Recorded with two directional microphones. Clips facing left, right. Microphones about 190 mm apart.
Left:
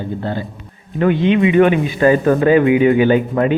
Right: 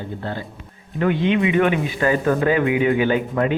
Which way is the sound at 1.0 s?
25° left (ahead or behind).